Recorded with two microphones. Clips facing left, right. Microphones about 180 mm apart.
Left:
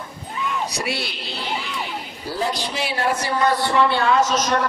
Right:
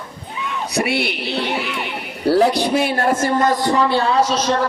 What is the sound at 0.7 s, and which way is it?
Speech, 60° right (ahead or behind).